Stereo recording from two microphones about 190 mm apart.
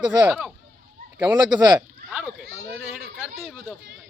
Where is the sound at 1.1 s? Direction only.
20° right (ahead or behind).